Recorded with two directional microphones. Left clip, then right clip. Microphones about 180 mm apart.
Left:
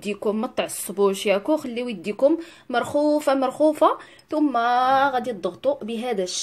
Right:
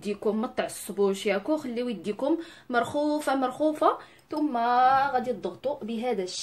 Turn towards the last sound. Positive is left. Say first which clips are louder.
# left 4 dB
turn(degrees=50)  # may be behind; listen again after turning